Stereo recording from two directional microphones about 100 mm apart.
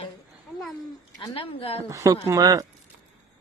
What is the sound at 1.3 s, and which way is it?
Speech, 65° left (ahead or behind).